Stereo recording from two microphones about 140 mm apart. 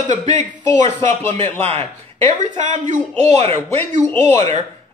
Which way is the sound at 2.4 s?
65° right (ahead or behind).